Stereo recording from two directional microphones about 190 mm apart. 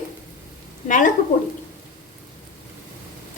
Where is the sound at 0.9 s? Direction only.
45° left (ahead or behind).